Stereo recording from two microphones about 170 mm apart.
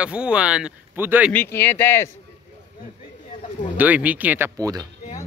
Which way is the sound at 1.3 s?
10° left (ahead or behind).